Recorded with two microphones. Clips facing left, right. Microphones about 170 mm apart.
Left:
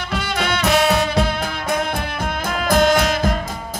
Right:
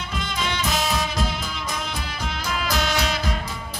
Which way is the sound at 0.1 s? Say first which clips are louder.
Left 6 dB; 70° left (ahead or behind).